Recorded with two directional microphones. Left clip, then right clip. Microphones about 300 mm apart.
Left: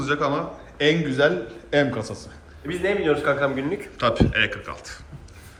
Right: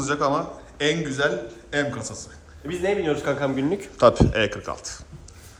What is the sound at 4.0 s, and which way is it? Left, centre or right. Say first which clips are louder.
A man's voice: right 3 dB; centre.